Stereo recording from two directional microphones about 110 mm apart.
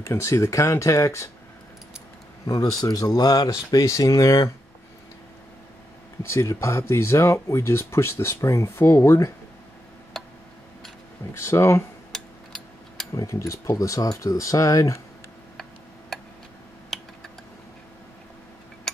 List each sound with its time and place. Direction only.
0.0 s speech: 25° left (ahead or behind)
2.4 s speech: 35° left (ahead or behind)
6.3 s speech: 25° left (ahead or behind)
11.3 s speech: 25° left (ahead or behind)
12.1 s mechanisms: 5° left (ahead or behind)
13.1 s speech: 30° left (ahead or behind)
16.9 s typing: centre (ahead or behind)